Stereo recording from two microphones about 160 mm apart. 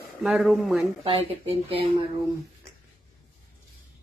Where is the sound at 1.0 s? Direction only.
35° right (ahead or behind).